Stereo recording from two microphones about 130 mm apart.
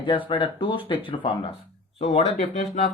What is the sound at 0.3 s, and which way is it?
Speech, 40° left (ahead or behind).